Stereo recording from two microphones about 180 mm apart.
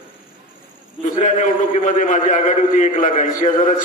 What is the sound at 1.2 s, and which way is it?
A man's voice, 45° left (ahead or behind).